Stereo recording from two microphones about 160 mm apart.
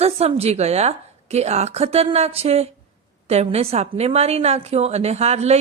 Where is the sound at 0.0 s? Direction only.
40° right (ahead or behind).